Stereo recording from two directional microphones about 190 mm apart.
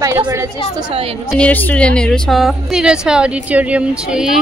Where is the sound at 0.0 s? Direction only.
15° right (ahead or behind).